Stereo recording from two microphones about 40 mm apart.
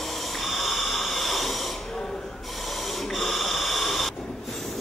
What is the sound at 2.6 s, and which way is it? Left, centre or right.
Snort, centre.